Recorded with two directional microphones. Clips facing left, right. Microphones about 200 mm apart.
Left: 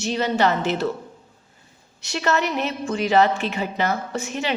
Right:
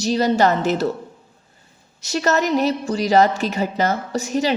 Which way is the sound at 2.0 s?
40° right (ahead or behind).